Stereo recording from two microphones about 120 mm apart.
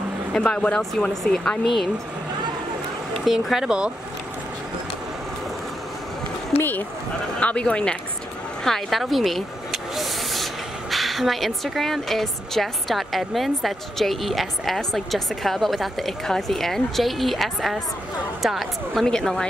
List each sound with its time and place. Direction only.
0.3 s speech: 10° left (ahead or behind)
3.3 s speech: 5° right (ahead or behind)
6.6 s speech: 15° left (ahead or behind)